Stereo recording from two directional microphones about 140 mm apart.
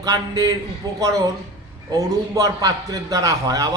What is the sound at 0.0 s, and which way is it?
A man's voice, 25° right (ahead or behind).